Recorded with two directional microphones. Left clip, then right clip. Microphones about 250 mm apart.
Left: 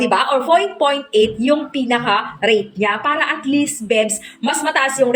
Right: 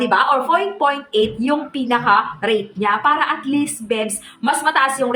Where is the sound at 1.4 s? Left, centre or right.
Centre.